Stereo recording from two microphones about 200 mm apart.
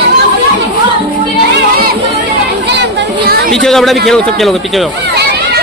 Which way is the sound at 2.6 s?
60° right (ahead or behind).